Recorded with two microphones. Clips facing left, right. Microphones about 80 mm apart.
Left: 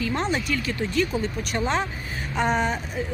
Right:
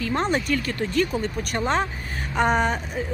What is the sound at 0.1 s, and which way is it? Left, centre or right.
Speech, right.